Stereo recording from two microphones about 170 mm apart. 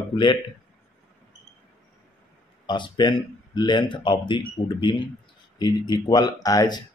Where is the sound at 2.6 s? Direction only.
25° left (ahead or behind).